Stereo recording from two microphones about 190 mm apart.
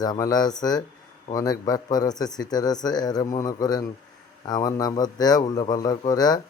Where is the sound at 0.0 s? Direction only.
20° left (ahead or behind).